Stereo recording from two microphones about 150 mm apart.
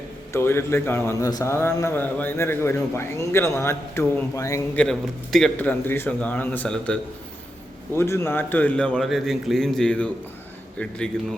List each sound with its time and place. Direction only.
0.3 s a man's voice: 15° left (ahead or behind)
4.8 s a man's voice: 5° left (ahead or behind)